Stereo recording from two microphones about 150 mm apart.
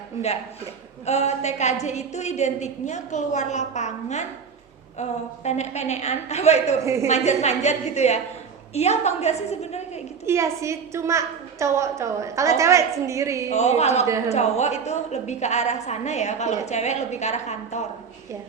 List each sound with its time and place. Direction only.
1.0 s a woman's voice: 45° left (ahead or behind)
6.8 s a woman's voice: 20° right (ahead or behind)
7.1 s a woman's voice: 50° left (ahead or behind)
10.2 s a woman's voice: 20° right (ahead or behind)
13.5 s a woman's voice: 45° left (ahead or behind)